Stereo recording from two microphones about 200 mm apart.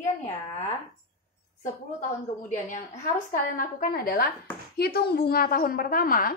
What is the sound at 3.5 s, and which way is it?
A woman's voice, 45° left (ahead or behind).